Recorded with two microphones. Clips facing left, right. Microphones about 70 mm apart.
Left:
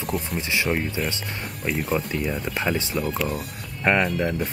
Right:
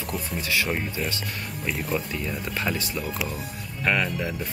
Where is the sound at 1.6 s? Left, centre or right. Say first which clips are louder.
Left 3 dB; centre.